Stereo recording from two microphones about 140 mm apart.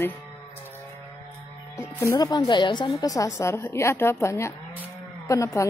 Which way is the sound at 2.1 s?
30° left (ahead or behind).